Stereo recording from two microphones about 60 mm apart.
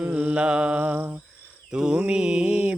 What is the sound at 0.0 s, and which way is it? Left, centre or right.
Mantra, right.